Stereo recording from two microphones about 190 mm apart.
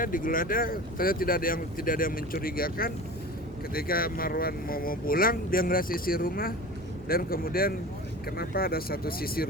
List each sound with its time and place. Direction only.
0.0 s speech: 45° left (ahead or behind)